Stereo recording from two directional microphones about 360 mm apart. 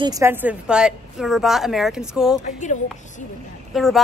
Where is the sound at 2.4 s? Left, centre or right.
Left.